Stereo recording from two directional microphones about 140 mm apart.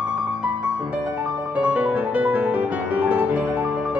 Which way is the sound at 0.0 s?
5° right (ahead or behind).